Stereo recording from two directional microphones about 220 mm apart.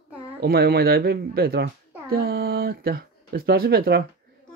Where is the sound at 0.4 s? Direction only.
45° right (ahead or behind).